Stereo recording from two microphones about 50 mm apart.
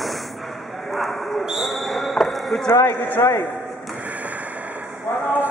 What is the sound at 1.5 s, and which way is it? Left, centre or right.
Basketball bounce, centre.